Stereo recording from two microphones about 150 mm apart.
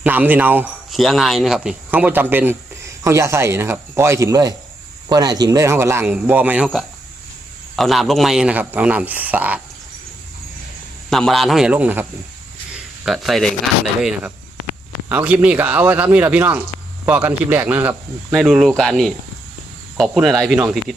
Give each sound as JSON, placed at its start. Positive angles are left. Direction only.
{"t": 0.0, "sound": "speech", "side_deg": -10}
{"t": 0.9, "sound": "speech", "side_deg": 0}
{"t": 7.8, "sound": "speech", "side_deg": 0}
{"t": 11.1, "sound": "a man's voice", "side_deg": 0}
{"t": 12.7, "sound": "a sound", "side_deg": 0}
{"t": 14.0, "sound": "a man's voice", "side_deg": -5}